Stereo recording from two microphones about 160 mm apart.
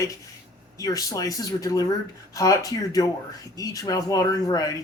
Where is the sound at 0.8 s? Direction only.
20° left (ahead or behind).